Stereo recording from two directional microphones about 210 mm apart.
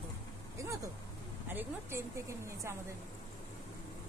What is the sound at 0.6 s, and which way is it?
Speech, 15° right (ahead or behind).